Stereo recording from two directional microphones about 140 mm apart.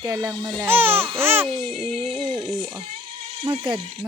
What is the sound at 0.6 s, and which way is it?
Speech, 15° right (ahead or behind).